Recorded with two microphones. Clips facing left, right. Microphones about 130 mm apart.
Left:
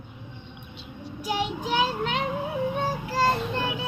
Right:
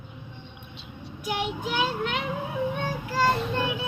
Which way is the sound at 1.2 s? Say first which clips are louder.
Left 1 dB; 35° left (ahead or behind).